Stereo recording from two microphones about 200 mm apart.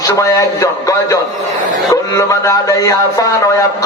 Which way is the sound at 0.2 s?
15° left (ahead or behind).